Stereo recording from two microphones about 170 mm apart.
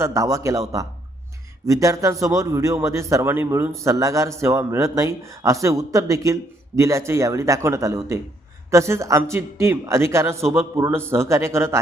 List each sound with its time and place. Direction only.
0.0 s a man's voice: 20° right (ahead or behind)